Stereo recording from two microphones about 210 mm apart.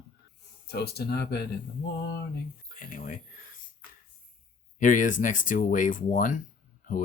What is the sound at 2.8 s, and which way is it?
Speech, 40° left (ahead or behind).